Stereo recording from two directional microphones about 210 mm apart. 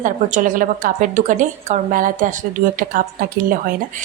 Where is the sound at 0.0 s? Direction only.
40° right (ahead or behind).